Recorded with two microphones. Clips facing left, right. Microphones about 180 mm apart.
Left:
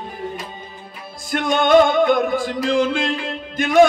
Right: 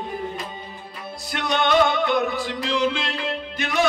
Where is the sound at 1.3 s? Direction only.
50° left (ahead or behind).